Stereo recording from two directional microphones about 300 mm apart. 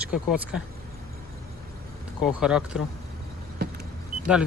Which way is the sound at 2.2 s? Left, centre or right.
Centre.